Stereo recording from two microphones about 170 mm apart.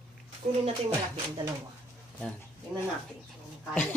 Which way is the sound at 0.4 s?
45° right (ahead or behind).